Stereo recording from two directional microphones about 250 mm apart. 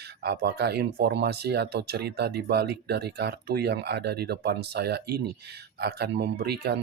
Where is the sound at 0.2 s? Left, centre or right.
Right.